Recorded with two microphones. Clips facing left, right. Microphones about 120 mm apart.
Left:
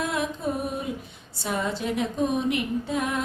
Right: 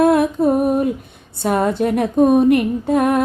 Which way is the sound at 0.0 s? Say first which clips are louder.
Right 14 dB; 55° right (ahead or behind).